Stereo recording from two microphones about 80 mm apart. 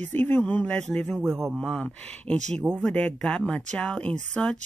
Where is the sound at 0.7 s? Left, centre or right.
Centre.